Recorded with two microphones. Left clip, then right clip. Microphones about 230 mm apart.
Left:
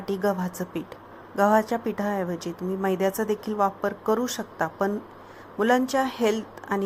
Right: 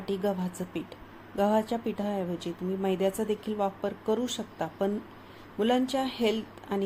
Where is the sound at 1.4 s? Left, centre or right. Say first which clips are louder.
Left 6 dB; centre.